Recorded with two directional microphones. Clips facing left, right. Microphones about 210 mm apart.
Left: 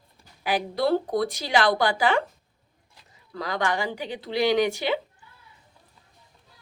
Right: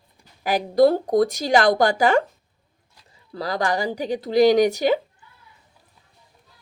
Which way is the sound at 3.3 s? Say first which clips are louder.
Right 3 dB; 35° right (ahead or behind).